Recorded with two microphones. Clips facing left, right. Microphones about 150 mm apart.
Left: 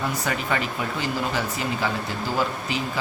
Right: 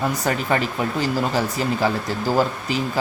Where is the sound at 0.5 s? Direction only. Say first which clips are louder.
Right 5 dB; 40° right (ahead or behind).